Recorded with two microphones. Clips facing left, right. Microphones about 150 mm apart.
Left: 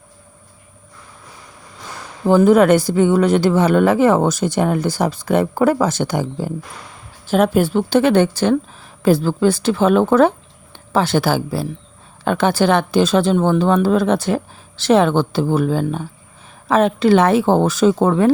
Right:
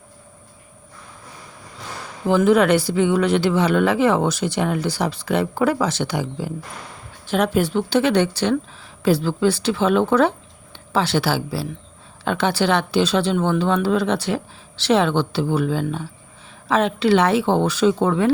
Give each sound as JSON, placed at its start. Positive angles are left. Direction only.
{"t": 2.2, "sound": "speech", "side_deg": 40}